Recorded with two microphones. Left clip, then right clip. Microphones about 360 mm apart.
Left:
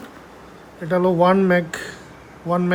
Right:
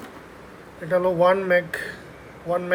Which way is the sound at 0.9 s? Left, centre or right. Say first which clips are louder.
Left 2 dB; left.